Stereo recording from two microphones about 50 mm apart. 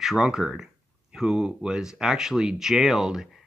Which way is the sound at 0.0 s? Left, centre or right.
Centre.